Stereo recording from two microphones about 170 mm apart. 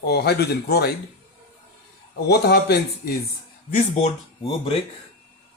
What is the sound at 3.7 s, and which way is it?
Speech, 45° left (ahead or behind).